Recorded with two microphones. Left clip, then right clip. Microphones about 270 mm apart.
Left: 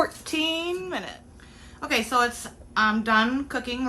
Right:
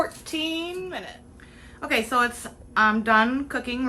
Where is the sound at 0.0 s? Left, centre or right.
Left.